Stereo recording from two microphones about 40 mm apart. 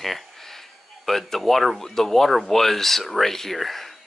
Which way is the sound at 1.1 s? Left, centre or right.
Centre.